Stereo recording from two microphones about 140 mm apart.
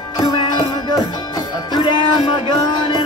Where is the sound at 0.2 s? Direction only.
30° left (ahead or behind).